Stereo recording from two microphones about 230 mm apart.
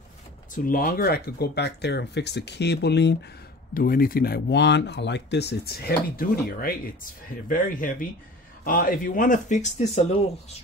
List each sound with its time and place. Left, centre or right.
0.7 s speech: left